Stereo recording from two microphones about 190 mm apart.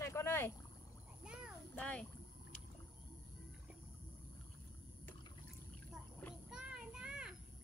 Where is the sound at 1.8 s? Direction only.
10° left (ahead or behind).